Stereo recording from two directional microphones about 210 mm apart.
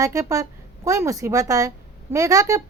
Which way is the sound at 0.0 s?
15° right (ahead or behind).